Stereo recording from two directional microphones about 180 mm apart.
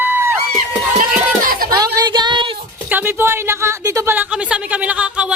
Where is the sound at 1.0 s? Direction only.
50° right (ahead or behind).